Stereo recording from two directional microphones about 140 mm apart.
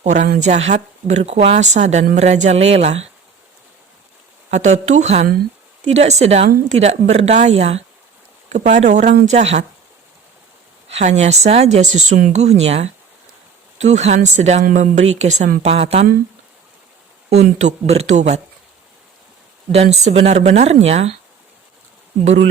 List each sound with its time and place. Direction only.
0.0 s speech: 60° right (ahead or behind)
4.5 s speech: 55° right (ahead or behind)
10.9 s speech: 55° right (ahead or behind)
14.6 s speech: 65° right (ahead or behind); by 16.0 s 45° right (ahead or behind)
17.2 s speech: 50° right (ahead or behind)
19.7 s speech: 50° right (ahead or behind)